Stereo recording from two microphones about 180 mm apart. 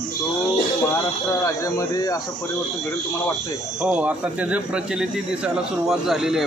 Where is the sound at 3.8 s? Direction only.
5° right (ahead or behind).